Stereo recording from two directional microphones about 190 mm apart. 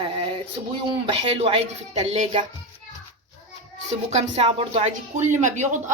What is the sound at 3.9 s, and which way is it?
Speech, 35° right (ahead or behind).